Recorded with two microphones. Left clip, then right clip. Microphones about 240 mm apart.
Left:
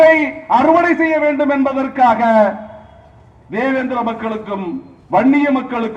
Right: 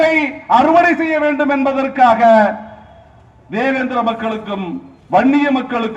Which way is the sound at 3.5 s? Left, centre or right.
Right.